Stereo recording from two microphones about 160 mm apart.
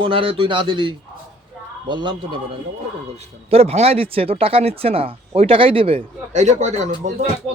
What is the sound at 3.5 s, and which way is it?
Speech, 40° right (ahead or behind).